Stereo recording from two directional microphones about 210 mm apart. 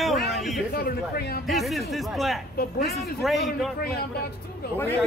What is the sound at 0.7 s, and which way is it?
Speech, 50° left (ahead or behind).